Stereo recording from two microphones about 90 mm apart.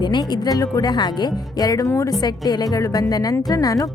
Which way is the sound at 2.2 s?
50° left (ahead or behind).